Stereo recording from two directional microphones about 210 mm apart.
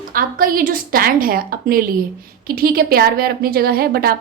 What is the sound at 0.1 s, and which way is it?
A woman's voice, 45° right (ahead or behind).